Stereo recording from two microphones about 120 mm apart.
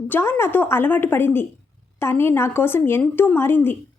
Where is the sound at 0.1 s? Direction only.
20° left (ahead or behind).